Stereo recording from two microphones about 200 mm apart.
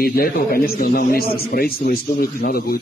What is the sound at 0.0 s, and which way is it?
Speech, 50° left (ahead or behind).